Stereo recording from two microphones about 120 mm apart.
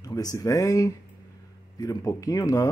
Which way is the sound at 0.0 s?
30° left (ahead or behind).